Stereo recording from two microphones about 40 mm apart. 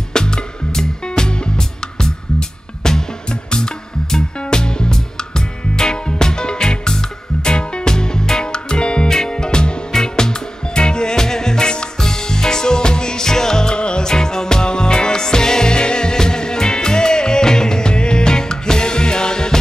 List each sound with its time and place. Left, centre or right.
0.1 s music: centre